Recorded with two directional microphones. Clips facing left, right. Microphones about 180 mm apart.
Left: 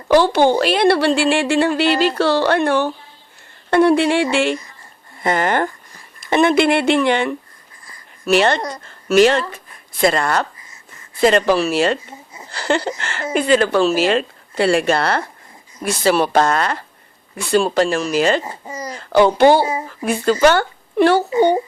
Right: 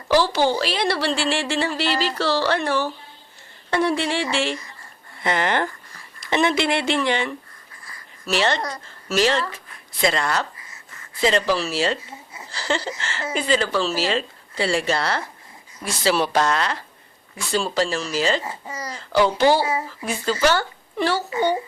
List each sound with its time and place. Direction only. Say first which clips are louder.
0.1 s a woman's voice: left 6 dB; 55° left (ahead or behind)
5.2 s a woman's voice: left 4 dB; 45° left (ahead or behind)
12.5 s a sound: left 6 dB; 55° left (ahead or behind)
13.3 s a woman's voice: left 7 dB; 55° left (ahead or behind)
18.4 s speech: left 3 dB; 20° left (ahead or behind)
18.9 s a woman's voice: left 6 dB; 55° left (ahead or behind)
21.2 s a child's voice: left 7 dB; 25° left (ahead or behind)